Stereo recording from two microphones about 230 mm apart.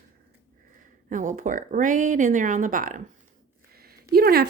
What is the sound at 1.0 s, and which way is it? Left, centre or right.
Speech, right.